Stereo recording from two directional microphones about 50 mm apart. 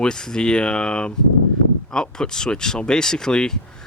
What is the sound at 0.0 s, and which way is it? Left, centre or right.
Speech, centre.